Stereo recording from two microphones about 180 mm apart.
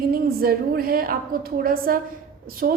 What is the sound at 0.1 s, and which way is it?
A woman's voice, 55° right (ahead or behind).